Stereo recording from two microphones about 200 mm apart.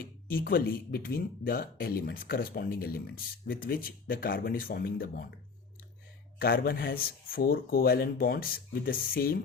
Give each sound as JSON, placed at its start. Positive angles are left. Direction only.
{"t": 0.0, "sound": "speech", "side_deg": 45}
{"t": 6.4, "sound": "speech", "side_deg": 50}